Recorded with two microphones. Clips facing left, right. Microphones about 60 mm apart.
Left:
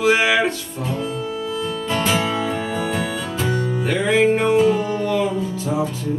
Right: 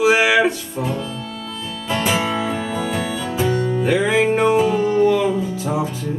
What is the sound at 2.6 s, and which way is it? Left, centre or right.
Music, centre.